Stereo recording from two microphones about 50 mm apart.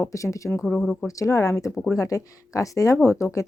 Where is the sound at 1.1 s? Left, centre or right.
Left.